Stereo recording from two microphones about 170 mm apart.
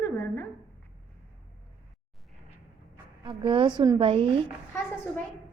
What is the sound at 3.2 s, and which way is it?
A woman's voice, 30° right (ahead or behind).